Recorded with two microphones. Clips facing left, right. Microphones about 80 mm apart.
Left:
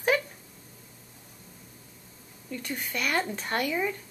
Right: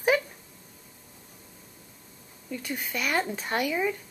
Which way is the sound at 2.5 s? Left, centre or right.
Centre.